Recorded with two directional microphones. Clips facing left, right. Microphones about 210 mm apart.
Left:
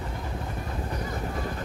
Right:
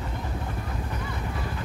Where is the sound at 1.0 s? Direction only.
40° left (ahead or behind).